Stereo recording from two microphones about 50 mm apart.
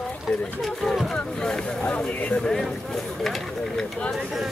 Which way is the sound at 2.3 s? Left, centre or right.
Centre.